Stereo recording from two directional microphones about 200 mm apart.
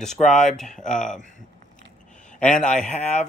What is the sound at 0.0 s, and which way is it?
Speech, centre (ahead or behind).